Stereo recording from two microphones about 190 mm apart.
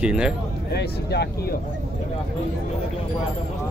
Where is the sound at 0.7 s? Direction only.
60° left (ahead or behind).